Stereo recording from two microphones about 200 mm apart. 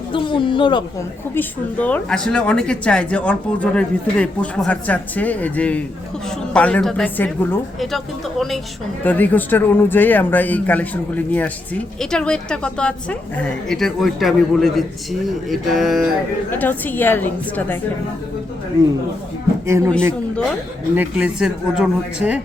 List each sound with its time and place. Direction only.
0.1 s speech: 25° left (ahead or behind)
1.4 s a woman's voice: 5° left (ahead or behind)
19.6 s speech: 15° right (ahead or behind)
20.9 s a woman's voice: 5° right (ahead or behind)